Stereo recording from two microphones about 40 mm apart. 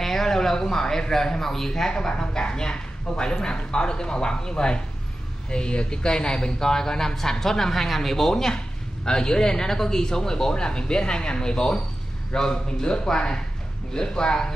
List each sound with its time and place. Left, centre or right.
0.0 s a man's voice: centre